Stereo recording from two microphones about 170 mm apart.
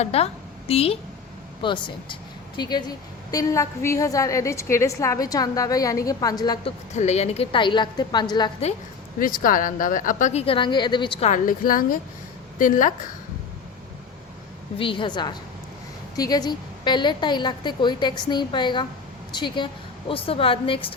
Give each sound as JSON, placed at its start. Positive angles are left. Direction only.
{"t": 0.0, "sound": "a woman's voice", "side_deg": 35}
{"t": 6.9, "sound": "a woman's voice", "side_deg": 40}
{"t": 9.1, "sound": "a woman's voice", "side_deg": 55}
{"t": 11.3, "sound": "a woman's voice", "side_deg": 55}
{"t": 14.8, "sound": "a woman's voice", "side_deg": 30}